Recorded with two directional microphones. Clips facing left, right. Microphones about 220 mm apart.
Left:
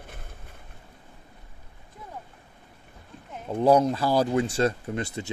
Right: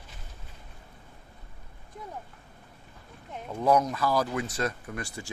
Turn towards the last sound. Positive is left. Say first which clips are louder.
# left 6 dB
turn(degrees=20)  # may be behind; listen again after turning